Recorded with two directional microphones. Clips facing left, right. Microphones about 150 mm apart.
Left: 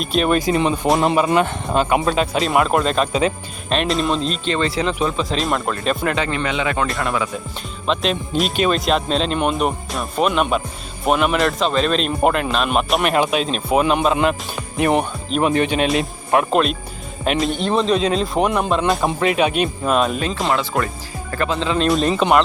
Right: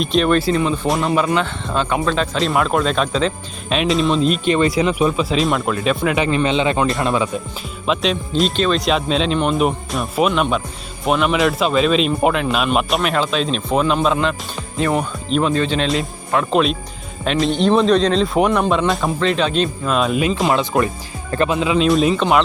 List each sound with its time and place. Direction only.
0.0 s speech: 5° left (ahead or behind)
3.7 s speech: centre (ahead or behind)
6.1 s speech: 20° right (ahead or behind)
7.9 s speech: centre (ahead or behind)
13.1 s speech: 15° left (ahead or behind)
14.8 s speech: 20° left (ahead or behind)
16.5 s speech: centre (ahead or behind)
20.0 s speech: centre (ahead or behind)
20.5 s speech: 20° right (ahead or behind)
21.6 s speech: 5° right (ahead or behind)